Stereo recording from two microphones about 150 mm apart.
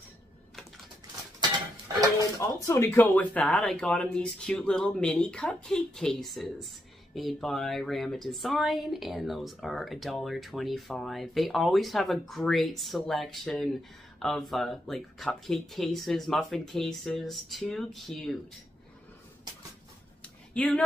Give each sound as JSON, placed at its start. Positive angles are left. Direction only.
{"t": 2.3, "sound": "speech", "side_deg": 20}
{"t": 20.5, "sound": "speech", "side_deg": 10}